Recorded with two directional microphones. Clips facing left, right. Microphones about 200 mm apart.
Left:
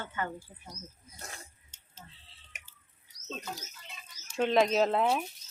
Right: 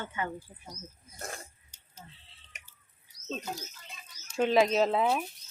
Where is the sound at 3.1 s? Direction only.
40° left (ahead or behind).